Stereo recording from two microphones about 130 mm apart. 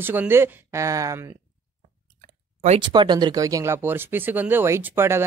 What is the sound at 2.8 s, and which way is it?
Speech, 35° right (ahead or behind).